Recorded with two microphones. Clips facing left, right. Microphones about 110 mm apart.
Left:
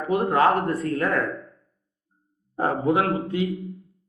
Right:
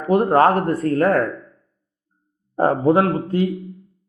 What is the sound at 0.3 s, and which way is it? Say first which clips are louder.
Speech: right 2 dB; 40° right (ahead or behind).